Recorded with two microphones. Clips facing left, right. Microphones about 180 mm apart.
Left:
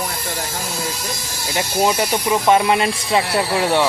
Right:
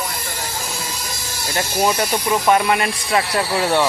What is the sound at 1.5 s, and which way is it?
Speech, 15° left (ahead or behind).